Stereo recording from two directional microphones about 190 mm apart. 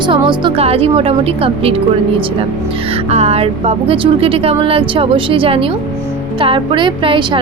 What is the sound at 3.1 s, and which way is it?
A woman's voice, 35° right (ahead or behind).